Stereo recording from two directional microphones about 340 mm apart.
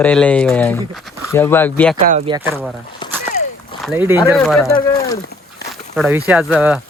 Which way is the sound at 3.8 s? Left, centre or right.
Centre.